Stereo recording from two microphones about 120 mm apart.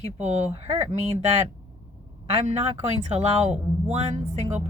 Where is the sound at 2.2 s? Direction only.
65° right (ahead or behind).